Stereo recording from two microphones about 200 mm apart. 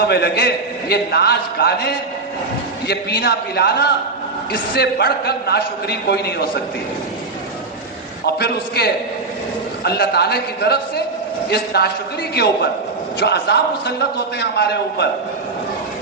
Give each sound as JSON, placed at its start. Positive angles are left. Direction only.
{"t": 0.1, "sound": "a man's voice", "side_deg": 55}
{"t": 8.4, "sound": "a man's voice", "side_deg": 55}
{"t": 13.1, "sound": "a man's voice", "side_deg": 55}